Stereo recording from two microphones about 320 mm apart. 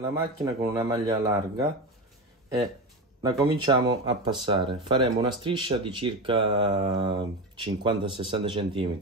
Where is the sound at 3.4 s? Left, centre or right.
Centre.